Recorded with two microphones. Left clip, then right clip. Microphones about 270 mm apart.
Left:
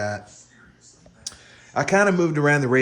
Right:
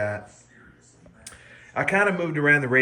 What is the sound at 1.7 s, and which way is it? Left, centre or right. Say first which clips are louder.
Speech: left 3 dB; centre.